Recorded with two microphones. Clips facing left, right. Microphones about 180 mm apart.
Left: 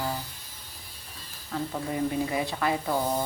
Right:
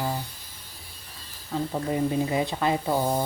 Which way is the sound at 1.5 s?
20° right (ahead or behind).